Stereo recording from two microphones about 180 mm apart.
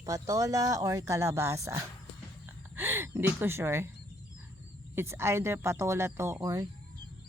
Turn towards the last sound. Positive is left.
turn(degrees=-20)  # may be behind; listen again after turning